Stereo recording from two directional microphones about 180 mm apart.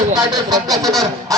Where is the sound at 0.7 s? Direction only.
Centre (ahead or behind).